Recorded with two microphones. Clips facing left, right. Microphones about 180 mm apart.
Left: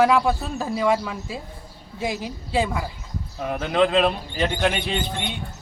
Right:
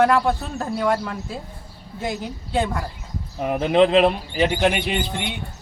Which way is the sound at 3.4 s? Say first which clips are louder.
Right 4 dB; 20° right (ahead or behind).